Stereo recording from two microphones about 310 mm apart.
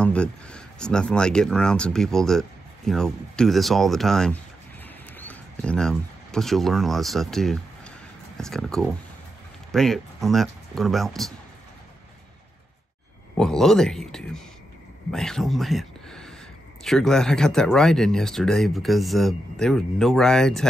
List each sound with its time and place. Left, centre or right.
0.0 s speech: centre
4.8 s a sound: centre
8.4 s speech: centre
13.4 s speech: centre